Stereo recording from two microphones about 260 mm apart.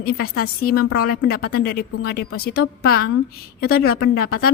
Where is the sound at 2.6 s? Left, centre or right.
Left.